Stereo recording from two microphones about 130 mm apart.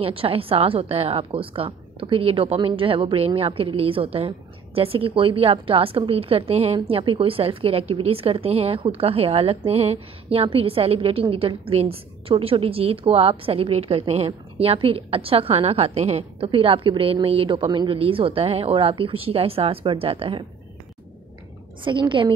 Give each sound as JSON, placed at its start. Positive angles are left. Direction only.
{"t": 0.0, "sound": "a woman's voice", "side_deg": -45}
{"t": 21.9, "sound": "a woman's voice", "side_deg": -35}